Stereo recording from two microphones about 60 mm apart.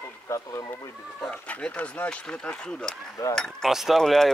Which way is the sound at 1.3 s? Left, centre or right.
Left.